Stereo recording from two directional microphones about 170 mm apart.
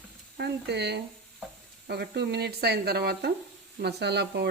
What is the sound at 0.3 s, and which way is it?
Speech, 75° right (ahead or behind).